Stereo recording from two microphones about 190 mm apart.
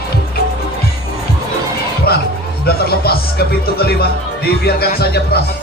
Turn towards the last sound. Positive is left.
turn(degrees=55)  # may be behind; listen again after turning